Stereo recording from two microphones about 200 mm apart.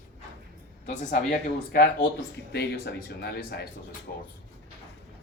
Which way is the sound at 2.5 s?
55° left (ahead or behind).